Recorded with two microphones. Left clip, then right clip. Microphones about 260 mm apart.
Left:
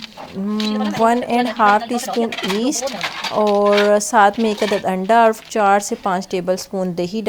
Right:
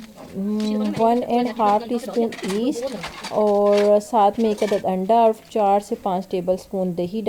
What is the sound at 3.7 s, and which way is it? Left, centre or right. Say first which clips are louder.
Speech: left 2 dB; left.